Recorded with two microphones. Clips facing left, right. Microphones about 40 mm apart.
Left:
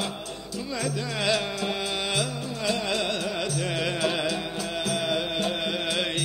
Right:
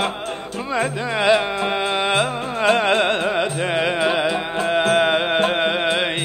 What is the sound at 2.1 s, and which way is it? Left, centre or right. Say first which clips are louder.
Music: right 9 dB; right.